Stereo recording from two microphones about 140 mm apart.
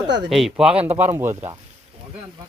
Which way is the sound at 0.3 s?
Centre (ahead or behind).